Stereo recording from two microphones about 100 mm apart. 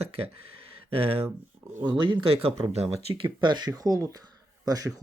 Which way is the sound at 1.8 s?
50° right (ahead or behind).